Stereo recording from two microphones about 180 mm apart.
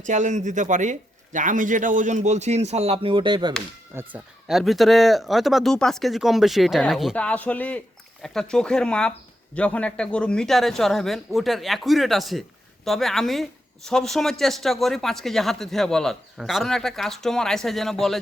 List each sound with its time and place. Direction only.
0.0 s speech: 40° right (ahead or behind); by 3.5 s 25° right (ahead or behind)
3.9 s a man's voice: 5° right (ahead or behind)